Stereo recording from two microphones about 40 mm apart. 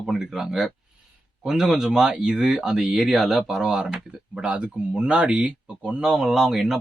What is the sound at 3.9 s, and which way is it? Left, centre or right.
Speech, right.